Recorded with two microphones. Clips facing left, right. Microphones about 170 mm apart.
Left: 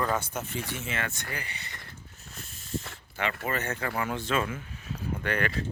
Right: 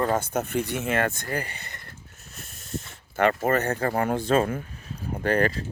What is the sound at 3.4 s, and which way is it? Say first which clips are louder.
Speech: right 8 dB; 45° right (ahead or behind).